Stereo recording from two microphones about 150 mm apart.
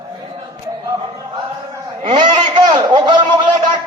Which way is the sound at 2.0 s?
30° right (ahead or behind).